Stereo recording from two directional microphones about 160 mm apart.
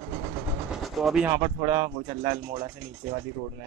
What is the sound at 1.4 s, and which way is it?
Speech, 35° right (ahead or behind).